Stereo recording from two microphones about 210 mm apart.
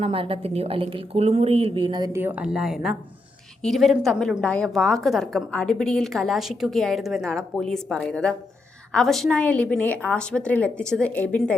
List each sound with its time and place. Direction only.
0.0 s a woman's voice: 25° right (ahead or behind); by 11.5 s 5° left (ahead or behind)